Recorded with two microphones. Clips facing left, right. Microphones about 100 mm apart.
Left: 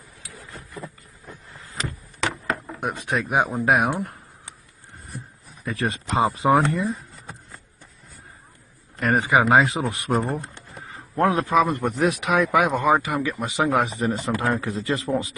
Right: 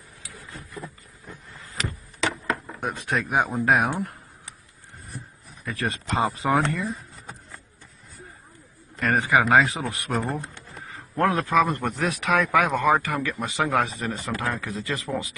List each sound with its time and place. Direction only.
2.8 s speech: 15° left (ahead or behind)
5.7 s speech: 25° left (ahead or behind)
9.0 s speech: 20° left (ahead or behind)